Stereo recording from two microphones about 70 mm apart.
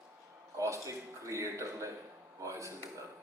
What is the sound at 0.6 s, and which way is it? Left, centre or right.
A man's voice, right.